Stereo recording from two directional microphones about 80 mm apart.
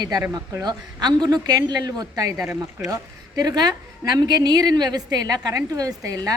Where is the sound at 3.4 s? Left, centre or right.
Right.